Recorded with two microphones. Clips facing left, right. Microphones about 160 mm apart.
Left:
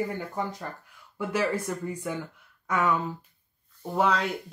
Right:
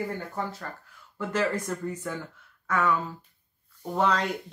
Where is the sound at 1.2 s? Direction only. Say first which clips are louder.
Even; 10° left (ahead or behind).